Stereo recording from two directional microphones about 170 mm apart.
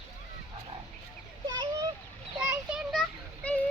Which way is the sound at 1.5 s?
20° right (ahead or behind).